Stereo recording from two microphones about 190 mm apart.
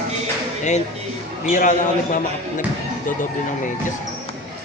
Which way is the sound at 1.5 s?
45° left (ahead or behind).